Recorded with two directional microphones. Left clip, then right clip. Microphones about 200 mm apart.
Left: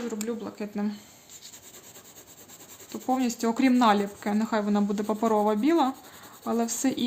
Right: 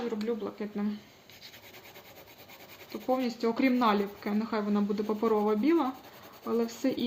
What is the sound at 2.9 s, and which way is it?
Speech, 40° left (ahead or behind).